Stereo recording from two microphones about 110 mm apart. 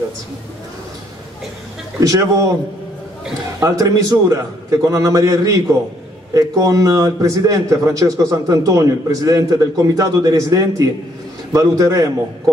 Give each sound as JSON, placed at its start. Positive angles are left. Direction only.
{"t": 2.0, "sound": "a man's voice", "side_deg": -30}
{"t": 3.5, "sound": "a man's voice", "side_deg": -30}